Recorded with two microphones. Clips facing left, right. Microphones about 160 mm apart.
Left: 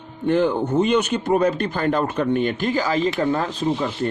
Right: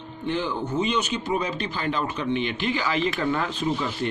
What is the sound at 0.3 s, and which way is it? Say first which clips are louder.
A man's voice: left 8 dB; 55° left (ahead or behind).